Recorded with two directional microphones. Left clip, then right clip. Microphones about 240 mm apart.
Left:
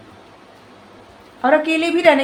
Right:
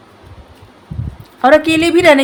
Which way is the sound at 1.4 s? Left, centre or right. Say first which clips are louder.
Right 6 dB; right.